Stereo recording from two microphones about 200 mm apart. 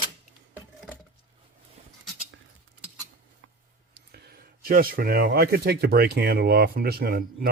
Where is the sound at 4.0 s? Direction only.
55° right (ahead or behind).